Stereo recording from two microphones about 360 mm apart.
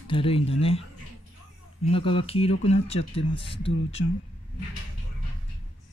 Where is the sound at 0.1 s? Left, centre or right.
Centre.